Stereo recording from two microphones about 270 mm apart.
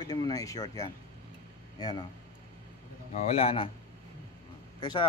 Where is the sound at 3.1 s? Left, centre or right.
Left.